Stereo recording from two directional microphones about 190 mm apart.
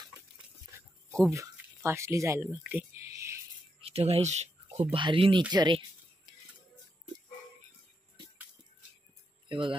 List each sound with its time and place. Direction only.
1.3 s speech: 15° right (ahead or behind)
3.8 s speech: 30° right (ahead or behind)
5.5 s a sound: 25° right (ahead or behind)
9.5 s speech: 25° right (ahead or behind)